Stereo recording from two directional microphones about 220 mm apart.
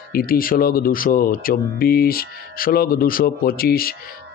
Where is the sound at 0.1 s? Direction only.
40° left (ahead or behind).